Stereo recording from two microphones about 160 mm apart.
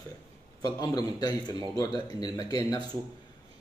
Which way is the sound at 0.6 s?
25° left (ahead or behind).